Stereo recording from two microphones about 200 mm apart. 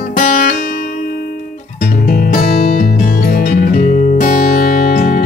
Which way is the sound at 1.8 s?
45° left (ahead or behind).